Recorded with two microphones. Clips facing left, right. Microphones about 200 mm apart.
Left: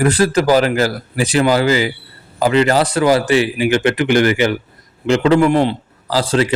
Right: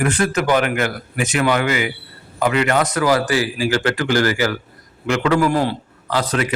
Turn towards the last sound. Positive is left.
turn(degrees=30)  # may be behind; listen again after turning